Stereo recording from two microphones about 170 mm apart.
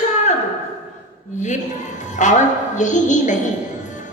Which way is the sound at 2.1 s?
45° left (ahead or behind).